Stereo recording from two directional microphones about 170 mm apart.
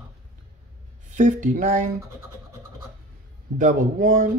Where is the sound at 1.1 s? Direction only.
50° right (ahead or behind).